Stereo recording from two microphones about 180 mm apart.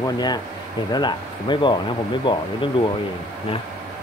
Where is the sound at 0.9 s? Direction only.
25° left (ahead or behind).